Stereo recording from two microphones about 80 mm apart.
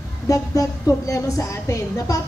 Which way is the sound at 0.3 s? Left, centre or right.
Left.